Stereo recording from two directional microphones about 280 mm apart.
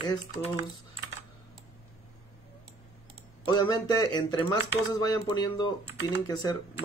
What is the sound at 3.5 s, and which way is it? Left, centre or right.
Speech, centre.